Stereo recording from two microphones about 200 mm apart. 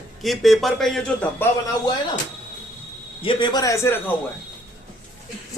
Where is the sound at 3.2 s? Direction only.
25° left (ahead or behind).